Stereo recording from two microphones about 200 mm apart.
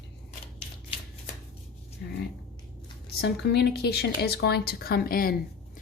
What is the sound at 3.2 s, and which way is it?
A woman's voice, 55° left (ahead or behind).